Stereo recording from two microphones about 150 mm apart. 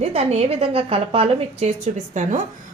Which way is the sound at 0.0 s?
45° right (ahead or behind).